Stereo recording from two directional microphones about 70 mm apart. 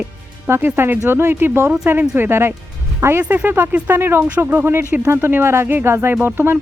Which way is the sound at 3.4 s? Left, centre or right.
Right.